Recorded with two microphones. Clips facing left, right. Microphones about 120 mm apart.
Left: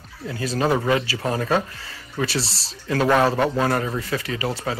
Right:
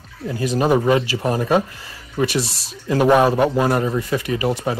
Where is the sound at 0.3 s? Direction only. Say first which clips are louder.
Right 4 dB; 15° right (ahead or behind).